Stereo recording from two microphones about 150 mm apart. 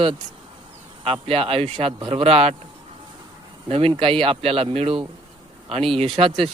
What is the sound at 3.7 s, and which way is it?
Speech, 40° right (ahead or behind).